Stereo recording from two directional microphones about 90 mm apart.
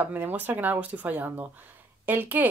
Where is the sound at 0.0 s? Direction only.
20° right (ahead or behind).